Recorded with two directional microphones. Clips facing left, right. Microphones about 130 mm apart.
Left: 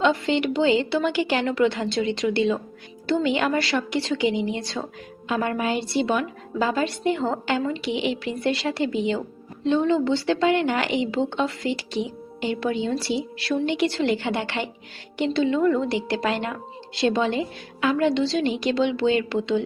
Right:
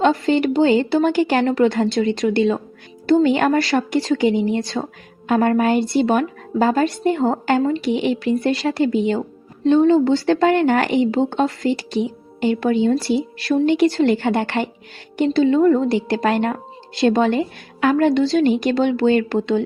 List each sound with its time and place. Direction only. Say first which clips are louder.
0.0 s a woman's voice: right 5 dB; 40° right (ahead or behind)